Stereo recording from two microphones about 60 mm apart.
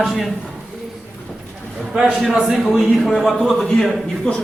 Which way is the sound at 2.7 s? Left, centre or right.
Centre.